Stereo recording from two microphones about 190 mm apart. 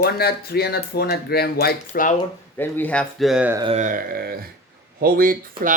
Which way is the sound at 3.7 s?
40° right (ahead or behind).